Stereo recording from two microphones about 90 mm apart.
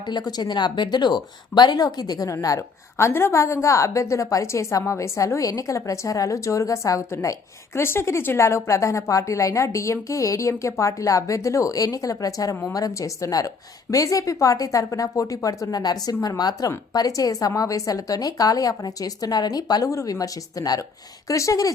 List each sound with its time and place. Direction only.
0.1 s speech: 50° left (ahead or behind)